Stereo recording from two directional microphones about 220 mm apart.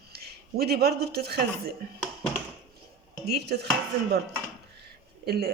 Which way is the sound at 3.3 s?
50° right (ahead or behind).